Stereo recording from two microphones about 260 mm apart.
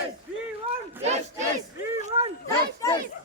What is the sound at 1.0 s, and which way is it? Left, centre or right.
Battle cry, right.